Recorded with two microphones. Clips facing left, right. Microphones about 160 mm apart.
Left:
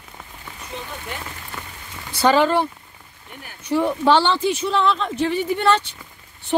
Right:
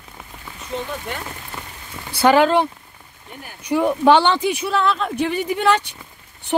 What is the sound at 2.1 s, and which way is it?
Speech, 10° right (ahead or behind).